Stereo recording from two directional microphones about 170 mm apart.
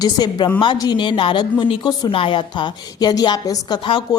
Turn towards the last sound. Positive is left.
turn(degrees=25)  # may be behind; listen again after turning